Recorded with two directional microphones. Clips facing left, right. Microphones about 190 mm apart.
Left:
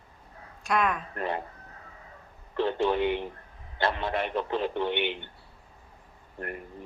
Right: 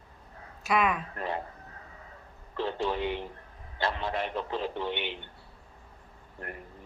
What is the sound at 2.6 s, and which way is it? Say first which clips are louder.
A man's voice: left 5 dB; 65° left (ahead or behind).